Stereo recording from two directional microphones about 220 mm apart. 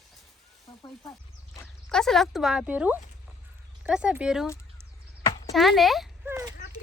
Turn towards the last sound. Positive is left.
turn(degrees=-10)  # may be behind; listen again after turning